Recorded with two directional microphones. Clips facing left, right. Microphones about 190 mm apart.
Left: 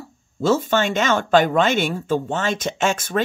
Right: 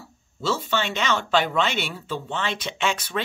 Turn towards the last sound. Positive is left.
turn(degrees=45)  # may be behind; listen again after turning